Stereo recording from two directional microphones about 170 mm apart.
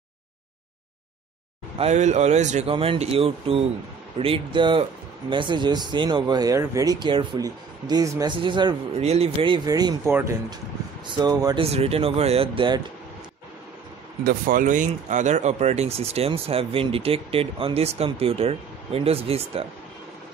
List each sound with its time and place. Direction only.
1.8 s speech: 40° right (ahead or behind)
2.7 s speech: 35° right (ahead or behind)
11.1 s speech: 25° right (ahead or behind)
11.6 s speech: 35° right (ahead or behind)
14.2 s speech: 55° right (ahead or behind); by 19.6 s 35° right (ahead or behind)